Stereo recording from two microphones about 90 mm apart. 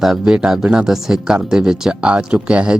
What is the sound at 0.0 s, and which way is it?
Speech, 5° right (ahead or behind).